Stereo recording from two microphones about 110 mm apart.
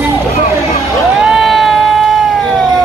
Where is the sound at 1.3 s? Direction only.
Centre (ahead or behind).